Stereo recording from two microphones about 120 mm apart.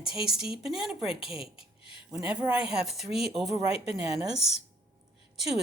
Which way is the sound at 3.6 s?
55° left (ahead or behind).